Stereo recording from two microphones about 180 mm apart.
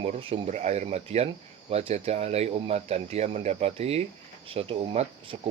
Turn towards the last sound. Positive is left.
turn(degrees=-30)  # may be behind; listen again after turning